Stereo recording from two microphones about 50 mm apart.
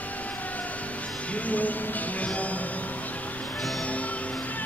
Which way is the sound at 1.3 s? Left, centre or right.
Left.